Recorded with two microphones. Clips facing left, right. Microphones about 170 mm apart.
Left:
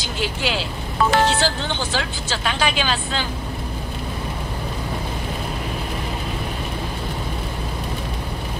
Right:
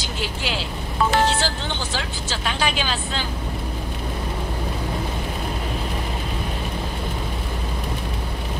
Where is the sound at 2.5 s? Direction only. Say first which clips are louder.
Left 2 dB; 85° left.